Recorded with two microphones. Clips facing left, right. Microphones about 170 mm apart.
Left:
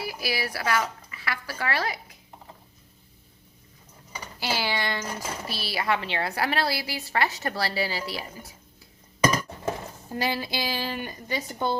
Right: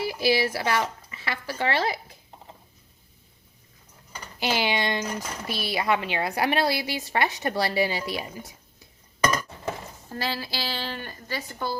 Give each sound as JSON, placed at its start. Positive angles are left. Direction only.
{"t": 0.0, "sound": "speech", "side_deg": -25}
{"t": 4.4, "sound": "a woman's voice", "side_deg": -20}
{"t": 10.1, "sound": "a woman's voice", "side_deg": 15}